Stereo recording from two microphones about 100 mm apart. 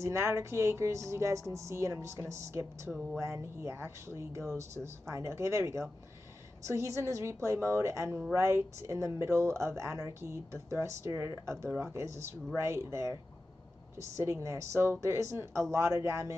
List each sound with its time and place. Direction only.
0.0 s speech: 25° right (ahead or behind)